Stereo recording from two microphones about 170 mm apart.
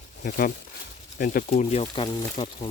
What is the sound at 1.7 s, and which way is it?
Speech, 35° left (ahead or behind).